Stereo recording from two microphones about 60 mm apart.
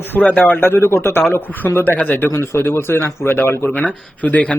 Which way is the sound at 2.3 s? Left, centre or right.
Left.